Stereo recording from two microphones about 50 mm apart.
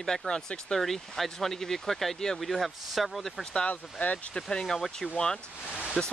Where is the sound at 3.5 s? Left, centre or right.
Left.